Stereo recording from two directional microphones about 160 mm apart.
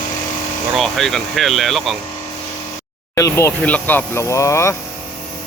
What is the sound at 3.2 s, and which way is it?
Speech, 20° left (ahead or behind).